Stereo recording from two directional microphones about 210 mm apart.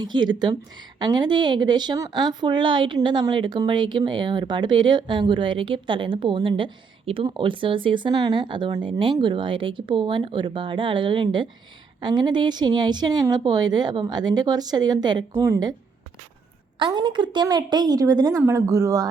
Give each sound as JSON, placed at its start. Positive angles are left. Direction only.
{"t": 0.0, "sound": "a woman's voice", "side_deg": -20}
{"t": 16.7, "sound": "a woman's voice", "side_deg": -20}